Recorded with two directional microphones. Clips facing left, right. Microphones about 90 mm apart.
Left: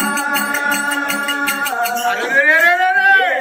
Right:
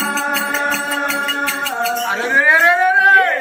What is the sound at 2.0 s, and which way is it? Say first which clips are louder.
Speech: even; 10° right (ahead or behind).